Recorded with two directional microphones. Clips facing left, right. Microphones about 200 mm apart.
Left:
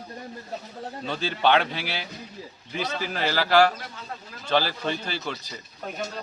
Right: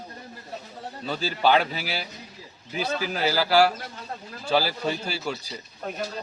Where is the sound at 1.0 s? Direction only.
5° right (ahead or behind).